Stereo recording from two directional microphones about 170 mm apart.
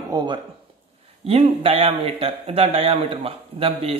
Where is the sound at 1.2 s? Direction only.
35° right (ahead or behind).